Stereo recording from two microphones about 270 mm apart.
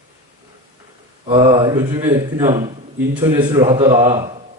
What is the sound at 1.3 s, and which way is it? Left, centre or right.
A man's voice, centre.